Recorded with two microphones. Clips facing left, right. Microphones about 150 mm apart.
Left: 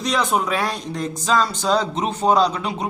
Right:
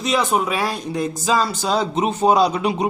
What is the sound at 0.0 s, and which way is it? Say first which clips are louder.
A man's voice: right 1 dB; 5° right (ahead or behind).